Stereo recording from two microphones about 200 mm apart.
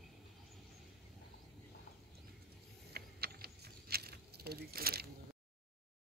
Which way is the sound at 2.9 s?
50° right (ahead or behind).